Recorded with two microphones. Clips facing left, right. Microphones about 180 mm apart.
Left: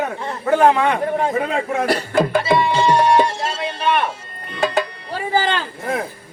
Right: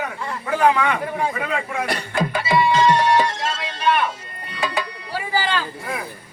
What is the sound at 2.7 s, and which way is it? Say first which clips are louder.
Music: left 2 dB; 10° left (ahead or behind).